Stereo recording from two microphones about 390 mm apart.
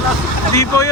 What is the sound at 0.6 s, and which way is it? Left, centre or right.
Vehicle, centre.